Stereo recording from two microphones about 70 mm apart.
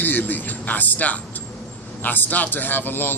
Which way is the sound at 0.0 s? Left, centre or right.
Left.